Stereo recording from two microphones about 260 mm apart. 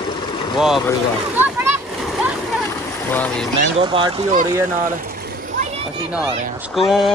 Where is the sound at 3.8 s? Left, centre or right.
Centre.